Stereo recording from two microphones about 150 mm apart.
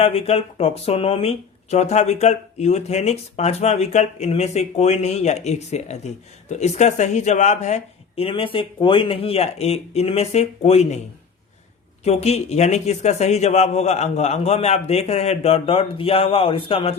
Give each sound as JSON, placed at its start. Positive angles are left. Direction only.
{"t": 0.0, "sound": "speech", "side_deg": 40}
{"t": 12.0, "sound": "speech", "side_deg": 45}